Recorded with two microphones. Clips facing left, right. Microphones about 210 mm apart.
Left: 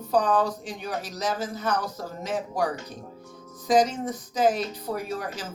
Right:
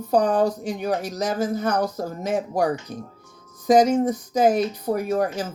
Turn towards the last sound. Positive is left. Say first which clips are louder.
# right 9 dB
turn(degrees=-45)  # may be behind; listen again after turning